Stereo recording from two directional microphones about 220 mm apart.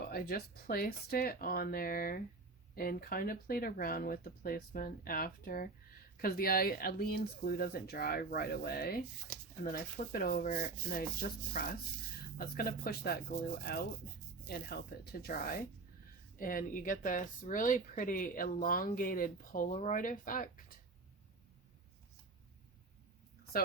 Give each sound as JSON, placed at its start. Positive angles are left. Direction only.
{"t": 0.1, "sound": "speech", "side_deg": 45}
{"t": 14.4, "sound": "speech", "side_deg": 45}